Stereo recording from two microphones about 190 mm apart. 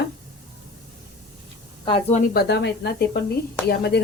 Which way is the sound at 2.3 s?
60° left (ahead or behind).